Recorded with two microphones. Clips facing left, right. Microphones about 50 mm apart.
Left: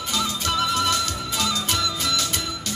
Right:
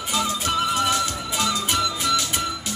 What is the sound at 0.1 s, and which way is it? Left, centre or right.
Music, centre.